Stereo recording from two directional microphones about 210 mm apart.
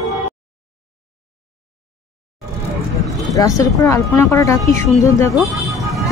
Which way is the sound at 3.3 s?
15° left (ahead or behind).